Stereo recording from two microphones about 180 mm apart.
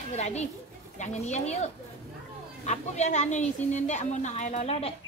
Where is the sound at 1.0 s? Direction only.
40° left (ahead or behind).